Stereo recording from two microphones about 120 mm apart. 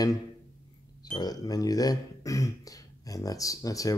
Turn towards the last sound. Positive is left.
turn(degrees=30)  # may be behind; listen again after turning